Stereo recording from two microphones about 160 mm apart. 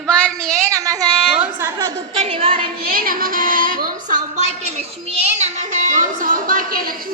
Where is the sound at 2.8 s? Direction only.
65° right (ahead or behind); by 4.5 s 50° right (ahead or behind).